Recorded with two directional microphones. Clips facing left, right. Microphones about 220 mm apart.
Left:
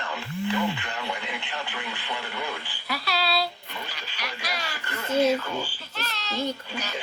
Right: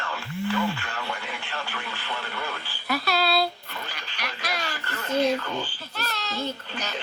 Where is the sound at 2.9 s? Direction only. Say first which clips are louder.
Right 4 dB; 50° right (ahead or behind).